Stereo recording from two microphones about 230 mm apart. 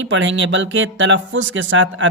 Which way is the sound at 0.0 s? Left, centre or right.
Right.